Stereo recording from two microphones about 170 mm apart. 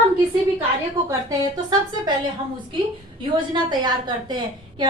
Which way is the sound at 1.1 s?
20° right (ahead or behind).